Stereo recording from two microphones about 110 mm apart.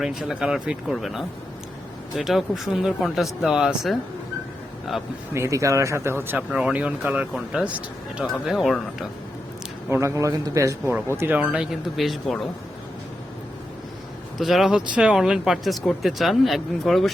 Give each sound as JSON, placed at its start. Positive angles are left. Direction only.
{"t": 0.0, "sound": "speech", "side_deg": -5}
{"t": 5.3, "sound": "speech", "side_deg": -25}
{"t": 6.3, "sound": "speech", "side_deg": -5}
{"t": 9.9, "sound": "speech", "side_deg": -30}
{"t": 11.2, "sound": "speech", "side_deg": -15}
{"t": 11.5, "sound": "speech", "side_deg": -5}
{"t": 14.3, "sound": "speech", "side_deg": 0}